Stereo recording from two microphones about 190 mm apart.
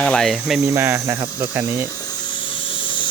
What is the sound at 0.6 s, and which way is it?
Cricket, 15° right (ahead or behind).